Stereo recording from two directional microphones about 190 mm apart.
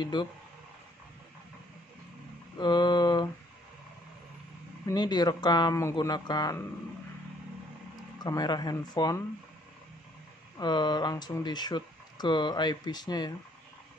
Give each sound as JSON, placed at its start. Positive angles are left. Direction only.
{"t": 0.0, "sound": "speech", "side_deg": 25}
{"t": 2.6, "sound": "speech", "side_deg": 25}
{"t": 4.8, "sound": "speech", "side_deg": 20}
{"t": 8.2, "sound": "speech", "side_deg": 20}
{"t": 10.6, "sound": "speech", "side_deg": 25}